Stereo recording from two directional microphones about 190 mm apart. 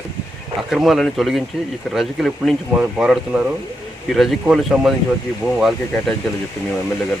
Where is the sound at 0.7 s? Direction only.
Centre (ahead or behind).